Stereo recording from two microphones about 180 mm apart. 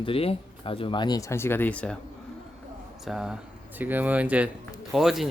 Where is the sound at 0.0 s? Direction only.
30° left (ahead or behind); by 2.0 s 5° left (ahead or behind).